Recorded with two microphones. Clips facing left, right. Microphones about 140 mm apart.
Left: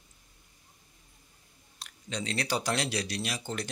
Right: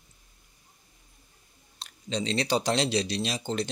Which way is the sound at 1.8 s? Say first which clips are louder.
Right 5 dB; 25° right (ahead or behind).